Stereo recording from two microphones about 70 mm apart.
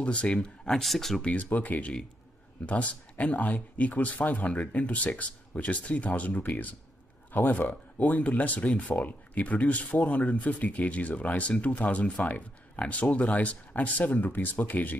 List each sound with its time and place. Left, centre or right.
0.0 s speech: centre
1.2 s speech: left